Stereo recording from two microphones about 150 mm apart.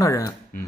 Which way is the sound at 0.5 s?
65° left (ahead or behind).